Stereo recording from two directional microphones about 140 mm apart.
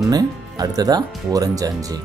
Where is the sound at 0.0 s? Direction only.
25° right (ahead or behind).